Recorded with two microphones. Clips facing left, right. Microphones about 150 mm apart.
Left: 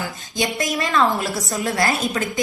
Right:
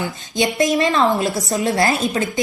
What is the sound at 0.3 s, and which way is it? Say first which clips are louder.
Speech: right 6 dB; 25° right (ahead or behind).